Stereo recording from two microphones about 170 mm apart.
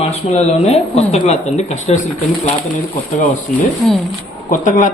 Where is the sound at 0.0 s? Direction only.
40° left (ahead or behind).